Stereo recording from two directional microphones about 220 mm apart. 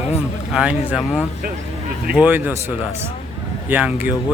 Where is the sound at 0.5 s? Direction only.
5° right (ahead or behind).